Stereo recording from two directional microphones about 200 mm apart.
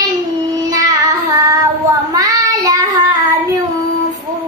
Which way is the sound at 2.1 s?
15° right (ahead or behind).